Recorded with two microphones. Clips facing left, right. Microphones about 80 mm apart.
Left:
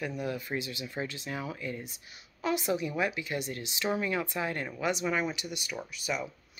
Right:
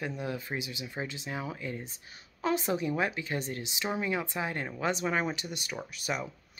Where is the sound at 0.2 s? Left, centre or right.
Right.